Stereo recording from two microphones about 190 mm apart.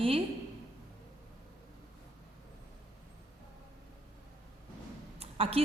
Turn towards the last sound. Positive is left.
turn(degrees=-30)  # may be behind; listen again after turning